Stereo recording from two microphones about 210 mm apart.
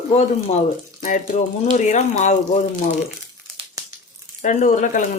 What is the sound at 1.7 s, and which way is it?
Speech, 35° left (ahead or behind).